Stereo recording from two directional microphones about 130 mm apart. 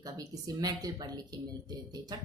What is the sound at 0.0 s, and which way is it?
A woman's voice, 30° right (ahead or behind).